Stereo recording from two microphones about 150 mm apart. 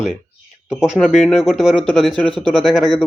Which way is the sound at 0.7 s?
5° right (ahead or behind).